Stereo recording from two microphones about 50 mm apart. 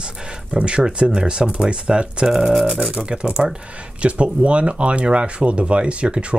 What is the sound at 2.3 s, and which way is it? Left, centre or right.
Speech, centre.